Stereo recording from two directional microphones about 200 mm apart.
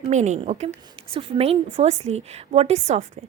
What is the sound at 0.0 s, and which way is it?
A woman's voice, 35° right (ahead or behind).